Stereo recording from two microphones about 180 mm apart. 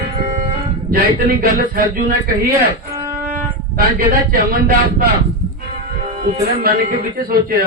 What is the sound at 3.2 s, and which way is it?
Shofar, 50° right (ahead or behind).